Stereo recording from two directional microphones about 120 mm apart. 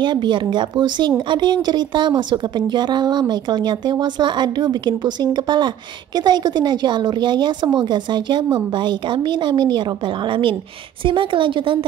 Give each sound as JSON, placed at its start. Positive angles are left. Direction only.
{"t": 0.0, "sound": "a woman's voice", "side_deg": -40}